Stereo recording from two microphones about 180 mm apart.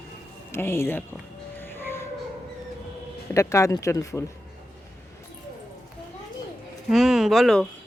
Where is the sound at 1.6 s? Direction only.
10° left (ahead or behind).